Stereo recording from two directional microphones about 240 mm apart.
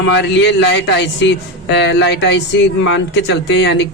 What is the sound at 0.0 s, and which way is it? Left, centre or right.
A man's voice, left.